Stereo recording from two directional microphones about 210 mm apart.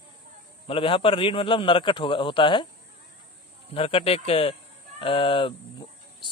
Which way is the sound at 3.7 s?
25° left (ahead or behind).